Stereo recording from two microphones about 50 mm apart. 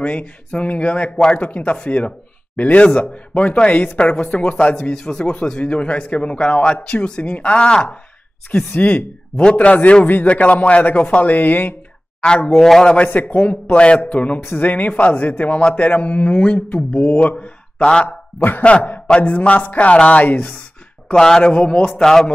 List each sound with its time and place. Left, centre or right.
0.0 s a man's voice: left
4.9 s speech: centre
10.0 s a man's voice: left
12.5 s a man's voice: centre
12.9 s a man's voice: left
21.1 s speech: centre
22.0 s a man's voice: centre